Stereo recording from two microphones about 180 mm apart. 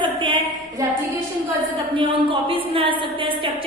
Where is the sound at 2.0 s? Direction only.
30° right (ahead or behind).